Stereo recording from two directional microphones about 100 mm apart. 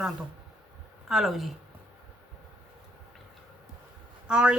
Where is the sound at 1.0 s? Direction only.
5° right (ahead or behind).